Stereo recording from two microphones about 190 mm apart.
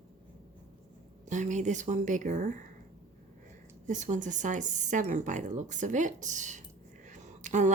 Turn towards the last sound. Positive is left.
turn(degrees=-40)  # may be behind; listen again after turning